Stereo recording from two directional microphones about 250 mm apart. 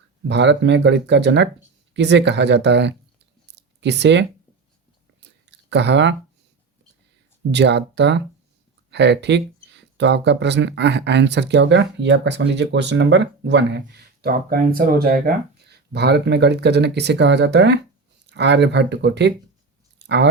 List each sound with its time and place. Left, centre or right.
0.3 s speech: right
3.4 s a sound: right
5.5 s speech: right
7.5 s speech: right